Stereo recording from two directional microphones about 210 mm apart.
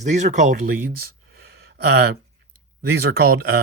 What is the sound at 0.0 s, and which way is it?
Speech, 35° right (ahead or behind).